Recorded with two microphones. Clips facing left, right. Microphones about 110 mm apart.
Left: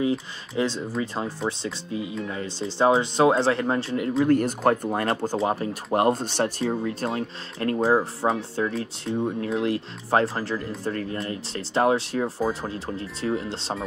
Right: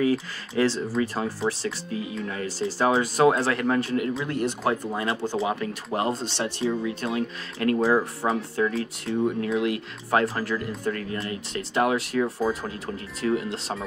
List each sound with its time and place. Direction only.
0.0 s speech: 20° left (ahead or behind)
4.2 s speech: 45° left (ahead or behind)
5.9 s speech: 55° left (ahead or behind); by 13.8 s 30° left (ahead or behind)